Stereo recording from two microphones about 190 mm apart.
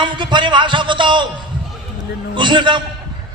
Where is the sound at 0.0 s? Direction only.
25° right (ahead or behind).